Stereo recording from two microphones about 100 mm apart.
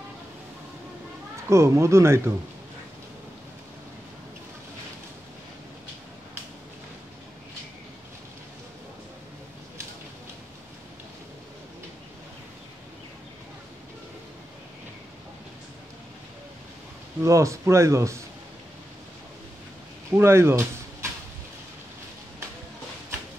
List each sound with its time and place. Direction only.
1.5 s speech: 30° right (ahead or behind)
17.2 s speech: 30° right (ahead or behind)
20.1 s speech: 25° right (ahead or behind)